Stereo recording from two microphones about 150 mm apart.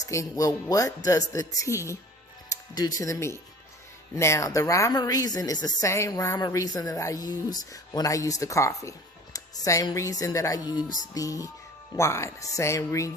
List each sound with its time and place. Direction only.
0.1 s a woman's voice: 20° left (ahead or behind)
2.5 s music: 25° left (ahead or behind)
3.0 s a woman's voice: 20° left (ahead or behind)